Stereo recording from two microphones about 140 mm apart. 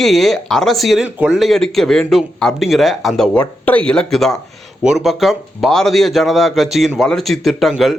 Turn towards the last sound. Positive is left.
turn(degrees=0)  # may be behind; listen again after turning